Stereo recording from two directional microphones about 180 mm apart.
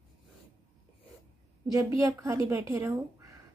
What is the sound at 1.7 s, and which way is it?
A woman's voice, 20° right (ahead or behind).